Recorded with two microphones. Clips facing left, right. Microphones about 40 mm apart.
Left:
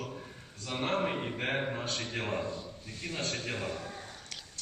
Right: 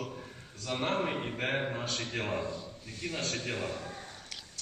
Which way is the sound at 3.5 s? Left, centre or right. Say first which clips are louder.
Right 1 dB; centre.